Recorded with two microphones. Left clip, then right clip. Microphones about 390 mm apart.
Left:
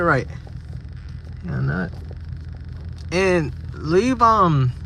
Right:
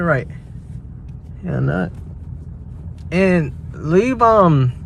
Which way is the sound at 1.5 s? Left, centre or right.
Right.